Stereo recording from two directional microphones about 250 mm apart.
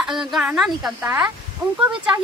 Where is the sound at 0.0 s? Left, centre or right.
Centre.